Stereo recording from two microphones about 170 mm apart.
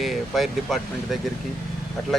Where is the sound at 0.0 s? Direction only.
Centre (ahead or behind).